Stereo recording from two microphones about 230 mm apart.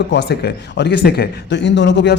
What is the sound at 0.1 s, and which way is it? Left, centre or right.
Speech, left.